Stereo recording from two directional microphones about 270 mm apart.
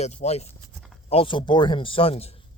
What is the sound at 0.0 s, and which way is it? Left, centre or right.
Speech, left.